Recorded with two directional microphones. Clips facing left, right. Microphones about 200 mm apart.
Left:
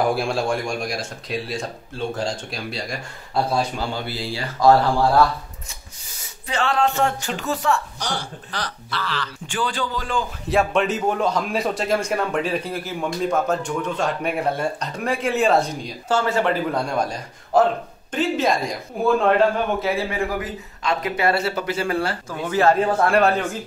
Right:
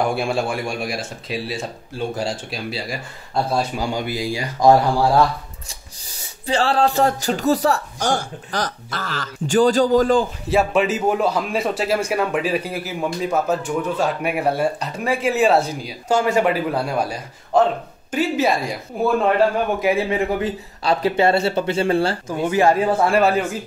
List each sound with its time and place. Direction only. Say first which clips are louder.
0.0 s a man's voice: even; centre (ahead or behind)
6.4 s speech: right 3 dB; 30° right (ahead or behind)
10.5 s a man's voice: right 1 dB; 5° right (ahead or behind)
17.5 s a man's voice: right 1 dB; 5° left (ahead or behind)
18.1 s speech: right 2 dB; 10° right (ahead or behind)
19.8 s speech: right 4 dB; 20° right (ahead or behind)
22.3 s speech: right 1 dB; 15° right (ahead or behind)